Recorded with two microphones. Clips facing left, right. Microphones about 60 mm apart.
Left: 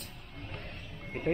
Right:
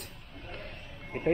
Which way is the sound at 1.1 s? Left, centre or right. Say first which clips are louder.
Right 3 dB; centre.